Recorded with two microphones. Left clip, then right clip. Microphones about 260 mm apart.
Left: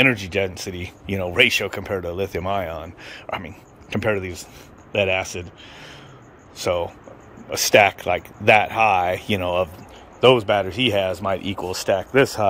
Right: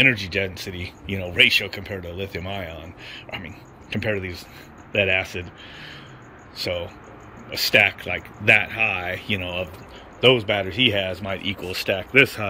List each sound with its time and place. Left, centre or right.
0.0 s speech: centre